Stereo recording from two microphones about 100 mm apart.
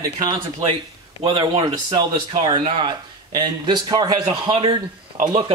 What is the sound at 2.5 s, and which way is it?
A man's voice, 50° right (ahead or behind).